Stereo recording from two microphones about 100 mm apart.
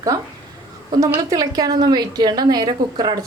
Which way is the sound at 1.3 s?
35° right (ahead or behind).